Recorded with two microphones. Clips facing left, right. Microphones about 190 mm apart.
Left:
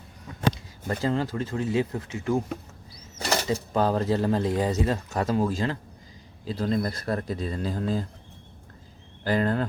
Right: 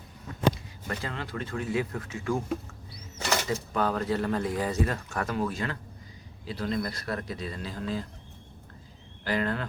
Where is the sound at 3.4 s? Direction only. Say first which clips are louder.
Left 4 dB; 30° left (ahead or behind).